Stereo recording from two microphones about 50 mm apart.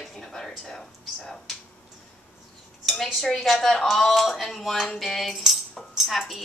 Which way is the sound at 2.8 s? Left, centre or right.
Centre.